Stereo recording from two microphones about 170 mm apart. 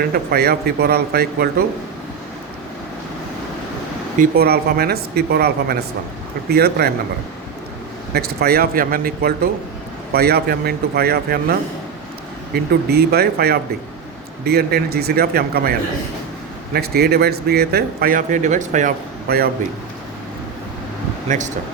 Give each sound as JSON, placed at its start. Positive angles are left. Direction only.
{"t": 0.1, "sound": "speech", "side_deg": -65}
{"t": 4.2, "sound": "speech", "side_deg": -65}
{"t": 8.1, "sound": "speech", "side_deg": -70}
{"t": 12.5, "sound": "speech", "side_deg": -65}
{"t": 16.7, "sound": "speech", "side_deg": -65}
{"t": 21.2, "sound": "speech", "side_deg": -45}